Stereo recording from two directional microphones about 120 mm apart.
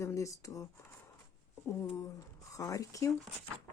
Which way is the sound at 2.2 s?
30° left (ahead or behind).